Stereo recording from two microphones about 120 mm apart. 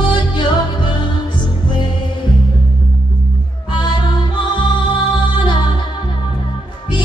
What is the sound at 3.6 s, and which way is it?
Music, 40° left (ahead or behind).